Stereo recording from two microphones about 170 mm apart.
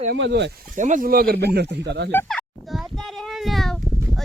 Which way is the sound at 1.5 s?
80° right.